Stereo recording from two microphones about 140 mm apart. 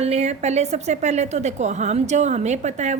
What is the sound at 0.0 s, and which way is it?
A woman's voice, 50° right (ahead or behind).